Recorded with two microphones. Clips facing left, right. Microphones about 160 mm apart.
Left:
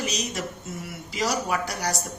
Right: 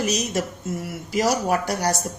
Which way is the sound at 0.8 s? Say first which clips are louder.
Right 6 dB; 50° right (ahead or behind).